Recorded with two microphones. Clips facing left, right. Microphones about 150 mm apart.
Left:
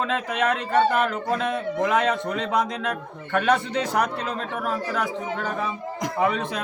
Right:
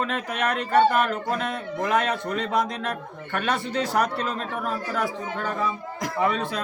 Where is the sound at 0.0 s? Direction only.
20° left (ahead or behind).